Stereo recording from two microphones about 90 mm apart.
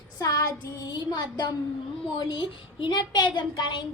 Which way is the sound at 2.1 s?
65° left (ahead or behind).